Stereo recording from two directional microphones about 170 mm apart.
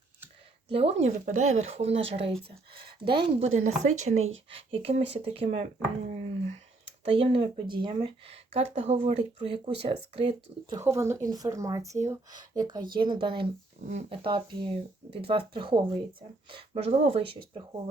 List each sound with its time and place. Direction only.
0.7 s speech: 35° right (ahead or behind)
3.4 s speech: 45° right (ahead or behind)
6.8 s speech: 35° right (ahead or behind)
10.8 s speech: 15° right (ahead or behind); by 17.6 s 35° right (ahead or behind)